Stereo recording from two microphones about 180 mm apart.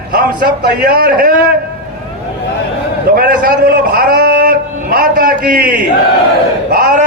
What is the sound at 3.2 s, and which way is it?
A man's voice, 55° right (ahead or behind).